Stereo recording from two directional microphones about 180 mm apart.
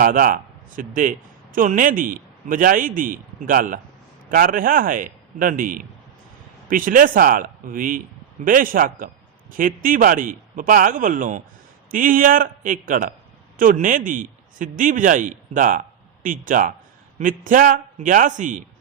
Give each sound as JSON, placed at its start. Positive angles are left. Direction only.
{"t": 0.0, "sound": "a man's voice", "side_deg": -50}